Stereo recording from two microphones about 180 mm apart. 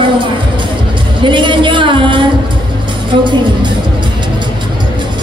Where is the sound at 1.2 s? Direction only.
25° right (ahead or behind).